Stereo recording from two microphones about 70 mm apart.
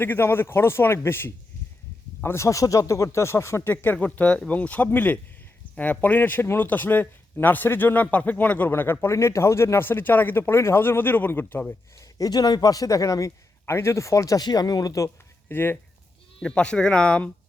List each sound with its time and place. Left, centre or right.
0.0 s speech: left
3.7 s speech: left
11.9 s a man's voice: left
14.4 s speech: left
15.4 s speech: left
16.4 s speech: centre